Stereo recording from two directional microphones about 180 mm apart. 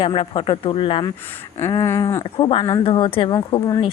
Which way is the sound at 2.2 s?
25° left (ahead or behind).